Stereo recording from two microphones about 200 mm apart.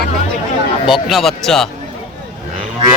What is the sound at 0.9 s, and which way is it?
Speech, centre (ahead or behind).